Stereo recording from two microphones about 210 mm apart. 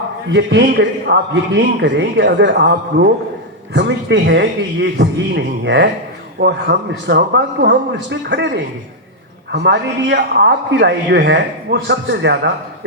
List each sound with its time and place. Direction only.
0.3 s a man's voice: 55° right (ahead or behind)